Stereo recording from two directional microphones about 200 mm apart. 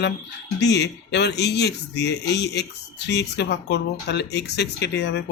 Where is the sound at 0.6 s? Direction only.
60° left (ahead or behind).